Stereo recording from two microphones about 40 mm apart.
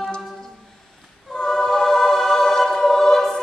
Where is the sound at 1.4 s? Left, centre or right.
Centre.